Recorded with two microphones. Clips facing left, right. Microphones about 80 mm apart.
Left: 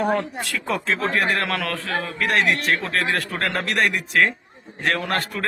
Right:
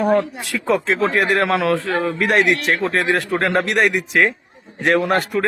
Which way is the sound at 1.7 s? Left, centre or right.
Right.